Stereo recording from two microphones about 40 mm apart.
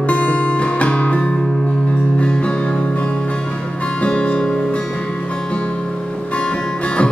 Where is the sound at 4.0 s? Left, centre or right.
Left.